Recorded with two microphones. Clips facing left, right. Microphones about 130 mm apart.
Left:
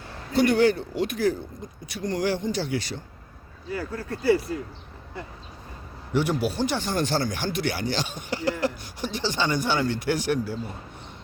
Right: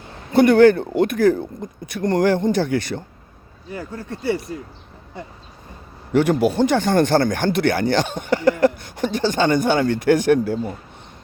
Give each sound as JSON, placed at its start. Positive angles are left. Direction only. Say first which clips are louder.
{"t": 0.3, "sound": "speech", "louder": "right 8 dB", "side_deg": -55}
{"t": 3.7, "sound": "speech", "louder": "even", "side_deg": -25}
{"t": 6.1, "sound": "speech", "louder": "right 8 dB", "side_deg": -55}